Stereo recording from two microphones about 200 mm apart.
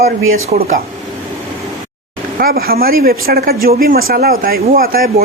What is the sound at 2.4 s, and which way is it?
Speech, 45° right (ahead or behind).